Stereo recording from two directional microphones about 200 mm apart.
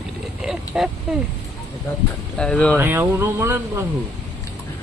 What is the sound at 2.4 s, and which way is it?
Speech, 5° left (ahead or behind).